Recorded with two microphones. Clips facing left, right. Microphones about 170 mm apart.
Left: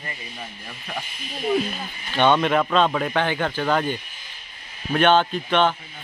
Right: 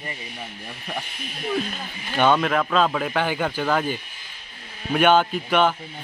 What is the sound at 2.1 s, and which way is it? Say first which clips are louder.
Speech: left 1 dB; 5° right (ahead or behind).